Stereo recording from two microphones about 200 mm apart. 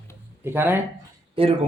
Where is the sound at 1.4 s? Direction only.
25° right (ahead or behind).